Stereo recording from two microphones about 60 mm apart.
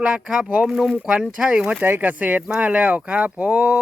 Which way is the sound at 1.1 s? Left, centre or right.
Centre.